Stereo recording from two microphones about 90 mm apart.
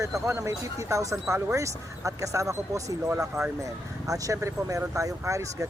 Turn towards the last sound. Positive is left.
turn(degrees=-35)  # may be behind; listen again after turning